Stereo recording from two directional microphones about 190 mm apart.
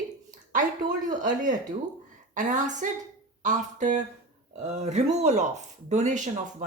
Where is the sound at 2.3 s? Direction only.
40° right (ahead or behind).